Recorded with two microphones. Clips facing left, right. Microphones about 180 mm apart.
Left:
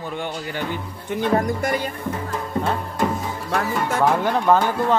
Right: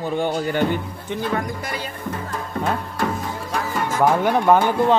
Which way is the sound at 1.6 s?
45° left (ahead or behind).